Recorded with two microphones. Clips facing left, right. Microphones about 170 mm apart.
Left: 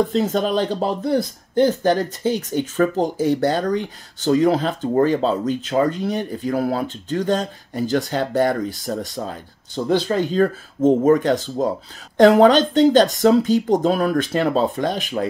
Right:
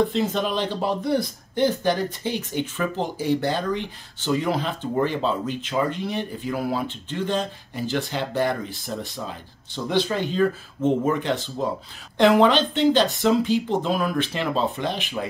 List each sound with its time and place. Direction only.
0.1 s speech: 40° left (ahead or behind)